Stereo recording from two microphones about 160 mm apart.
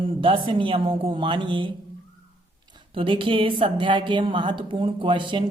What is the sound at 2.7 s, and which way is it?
A woman's voice, 30° right (ahead or behind).